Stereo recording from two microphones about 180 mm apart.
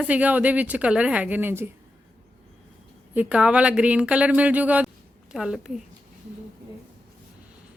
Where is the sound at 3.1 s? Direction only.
5° right (ahead or behind).